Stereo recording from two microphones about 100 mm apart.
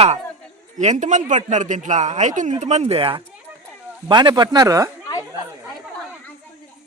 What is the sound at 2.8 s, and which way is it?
Speech, 75° right (ahead or behind).